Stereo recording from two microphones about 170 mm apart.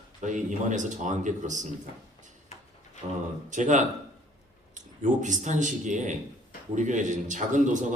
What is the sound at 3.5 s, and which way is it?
Speech, 45° right (ahead or behind).